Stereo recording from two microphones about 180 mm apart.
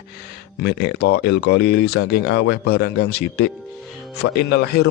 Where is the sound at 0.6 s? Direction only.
70° left (ahead or behind).